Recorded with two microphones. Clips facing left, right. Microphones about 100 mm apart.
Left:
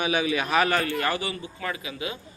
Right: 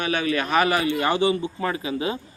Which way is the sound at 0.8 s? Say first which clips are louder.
Right 6 dB; 20° right (ahead or behind).